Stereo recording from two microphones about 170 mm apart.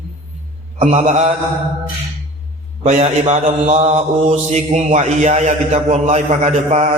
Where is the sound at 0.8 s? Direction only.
40° right (ahead or behind).